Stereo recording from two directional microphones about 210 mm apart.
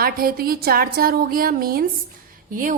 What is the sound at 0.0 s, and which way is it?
A woman's voice, 45° right (ahead or behind).